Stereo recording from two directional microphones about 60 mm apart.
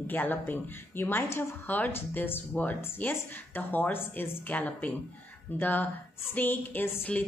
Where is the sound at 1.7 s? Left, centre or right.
Left.